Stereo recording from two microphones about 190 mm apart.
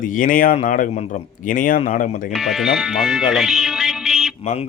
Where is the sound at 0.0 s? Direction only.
45° left (ahead or behind).